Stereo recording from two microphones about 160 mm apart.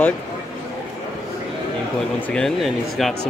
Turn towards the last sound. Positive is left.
turn(degrees=0)  # may be behind; listen again after turning